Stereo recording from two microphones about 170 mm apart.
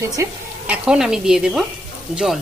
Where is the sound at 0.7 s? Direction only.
5° right (ahead or behind).